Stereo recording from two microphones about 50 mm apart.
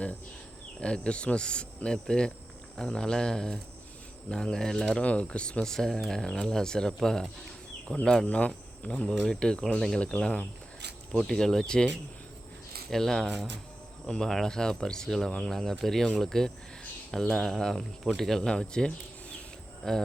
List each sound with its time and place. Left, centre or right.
0.8 s speech: centre
5.6 s speech: centre
8.3 s speech: left
12.9 s speech: centre
18.4 s speech: centre